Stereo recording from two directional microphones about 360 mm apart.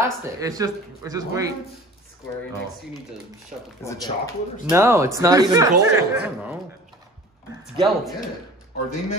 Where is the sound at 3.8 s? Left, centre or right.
Centre.